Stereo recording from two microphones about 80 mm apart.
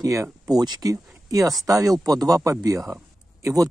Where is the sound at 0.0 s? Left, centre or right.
Right.